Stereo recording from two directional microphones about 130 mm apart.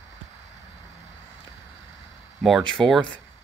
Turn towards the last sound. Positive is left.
turn(degrees=5)  # may be behind; listen again after turning